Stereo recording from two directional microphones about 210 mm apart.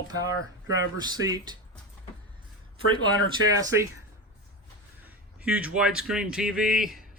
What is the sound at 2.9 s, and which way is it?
Speech, 15° right (ahead or behind).